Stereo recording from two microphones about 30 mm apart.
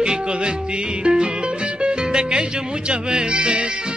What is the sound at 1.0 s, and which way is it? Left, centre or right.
Music, right.